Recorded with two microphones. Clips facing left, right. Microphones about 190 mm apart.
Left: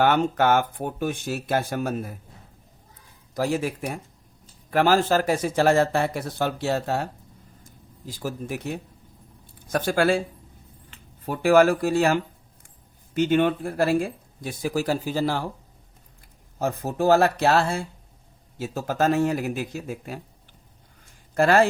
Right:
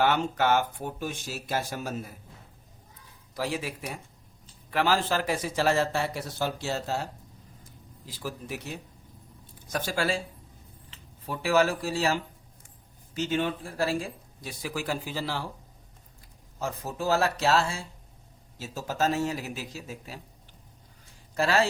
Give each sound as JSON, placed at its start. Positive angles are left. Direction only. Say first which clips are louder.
{"t": 0.0, "sound": "speech", "louder": "left 5 dB", "side_deg": 55}
{"t": 3.3, "sound": "speech", "louder": "left 7 dB", "side_deg": 45}
{"t": 7.6, "sound": "speech", "louder": "left 9 dB", "side_deg": 45}
{"t": 16.6, "sound": "speech", "louder": "left 8 dB", "side_deg": 55}
{"t": 21.3, "sound": "speech", "louder": "left 7 dB", "side_deg": 55}